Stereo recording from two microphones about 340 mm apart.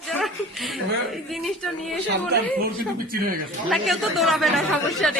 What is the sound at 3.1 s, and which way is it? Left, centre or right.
Speech, right.